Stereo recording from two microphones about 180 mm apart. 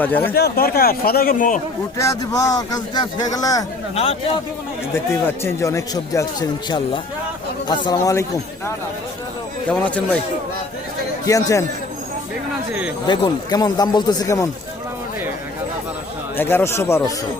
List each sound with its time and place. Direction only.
0.0 s speech: 10° left (ahead or behind)
0.3 s a man's voice: 60° left (ahead or behind)
2.0 s speech: 20° left (ahead or behind)
3.9 s a man's voice: 35° left (ahead or behind)
5.4 s speech: 15° left (ahead or behind)
9.6 s speech: 5° left (ahead or behind)
11.3 s speech: 20° left (ahead or behind)
13.1 s speech: 25° left (ahead or behind)
16.4 s speech: 10° left (ahead or behind)